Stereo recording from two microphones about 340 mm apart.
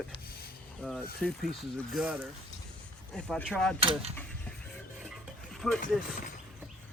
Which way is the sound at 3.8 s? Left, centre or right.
Centre.